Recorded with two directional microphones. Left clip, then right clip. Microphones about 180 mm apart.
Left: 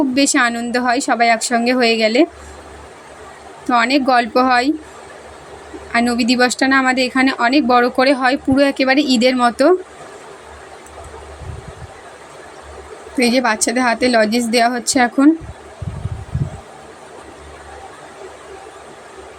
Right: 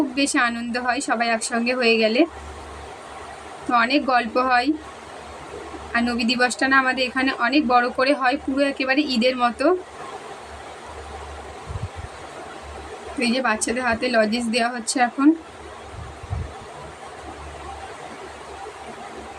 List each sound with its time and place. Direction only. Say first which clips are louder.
0.1 s a woman's voice: left 6 dB; 30° left (ahead or behind)
3.7 s a woman's voice: left 5 dB; 30° left (ahead or behind)
5.9 s a woman's voice: left 6 dB; 30° left (ahead or behind)
13.1 s a woman's voice: left 7 dB; 35° left (ahead or behind)